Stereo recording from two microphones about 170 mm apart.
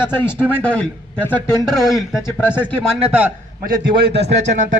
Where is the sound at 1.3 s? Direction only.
Centre (ahead or behind).